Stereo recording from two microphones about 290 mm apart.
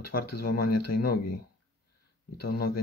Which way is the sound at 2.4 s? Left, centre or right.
Left.